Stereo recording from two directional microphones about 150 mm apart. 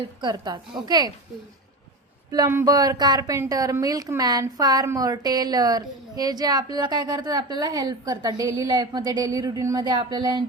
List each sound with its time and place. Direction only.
0.2 s speech: 30° right (ahead or behind)
2.6 s speech: 25° right (ahead or behind)